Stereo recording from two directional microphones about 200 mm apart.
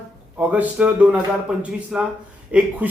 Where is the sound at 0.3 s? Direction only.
5° right (ahead or behind).